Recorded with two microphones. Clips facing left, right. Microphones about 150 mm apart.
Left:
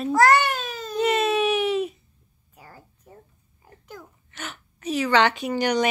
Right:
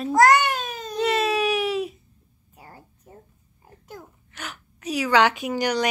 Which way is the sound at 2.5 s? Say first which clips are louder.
Right 1 dB; 25° right (ahead or behind).